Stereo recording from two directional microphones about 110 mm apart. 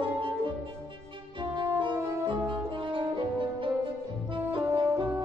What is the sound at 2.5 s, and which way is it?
Brass instrument, 50° right (ahead or behind).